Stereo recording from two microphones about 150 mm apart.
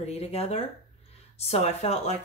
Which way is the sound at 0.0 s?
45° left (ahead or behind).